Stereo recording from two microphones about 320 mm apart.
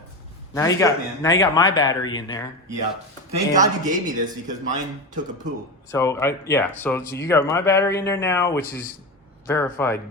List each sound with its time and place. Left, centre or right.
0.5 s speech: centre
3.5 s speech: right
5.9 s speech: centre